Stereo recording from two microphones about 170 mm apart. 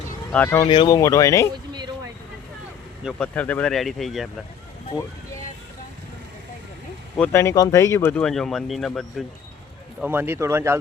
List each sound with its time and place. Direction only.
0.3 s speech: 10° left (ahead or behind)
3.0 s speech: 5° right (ahead or behind)
3.3 s speech: 10° left (ahead or behind)
7.2 s speech: 15° left (ahead or behind); by 9.2 s centre (ahead or behind)
10.0 s a man's voice: 10° right (ahead or behind)